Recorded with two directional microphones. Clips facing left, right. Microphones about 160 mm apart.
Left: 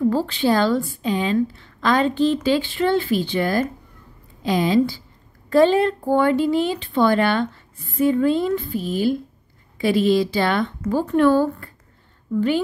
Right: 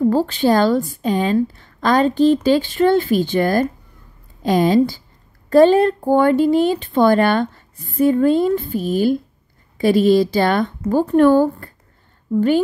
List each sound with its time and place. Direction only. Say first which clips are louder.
0.1 s speech: right 4 dB; 45° right (ahead or behind)